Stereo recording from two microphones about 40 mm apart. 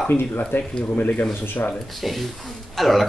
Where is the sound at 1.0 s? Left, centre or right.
Left.